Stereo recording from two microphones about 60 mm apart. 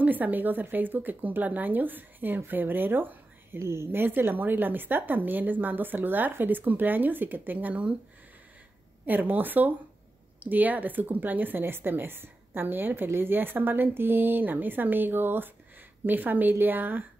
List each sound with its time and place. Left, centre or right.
0.0 s a woman's voice: right
3.5 s a woman's voice: right
9.0 s a woman's voice: right